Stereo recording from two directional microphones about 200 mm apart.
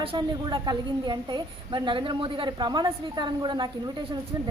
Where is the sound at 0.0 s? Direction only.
25° right (ahead or behind).